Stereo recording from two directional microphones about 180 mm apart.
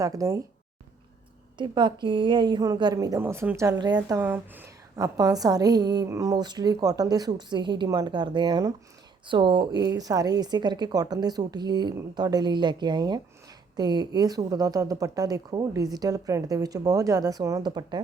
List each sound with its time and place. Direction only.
0.0 s a woman's voice: 20° right (ahead or behind)
1.5 s a woman's voice: 25° right (ahead or behind)
4.2 s a woman's voice: 10° right (ahead or behind)